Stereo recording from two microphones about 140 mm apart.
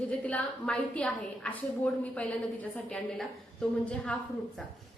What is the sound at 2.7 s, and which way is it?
A woman's voice, 5° left (ahead or behind).